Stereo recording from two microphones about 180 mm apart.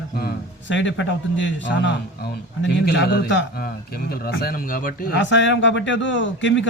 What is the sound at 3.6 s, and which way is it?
Speech, 55° left (ahead or behind).